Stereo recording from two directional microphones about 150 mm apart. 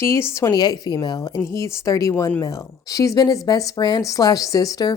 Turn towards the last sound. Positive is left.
turn(degrees=25)  # may be behind; listen again after turning